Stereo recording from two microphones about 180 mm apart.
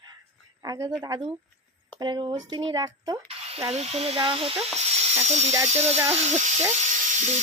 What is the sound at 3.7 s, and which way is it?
Speech, 35° right (ahead or behind).